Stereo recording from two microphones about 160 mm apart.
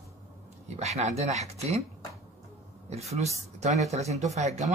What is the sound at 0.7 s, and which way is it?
Speech, 40° right (ahead or behind).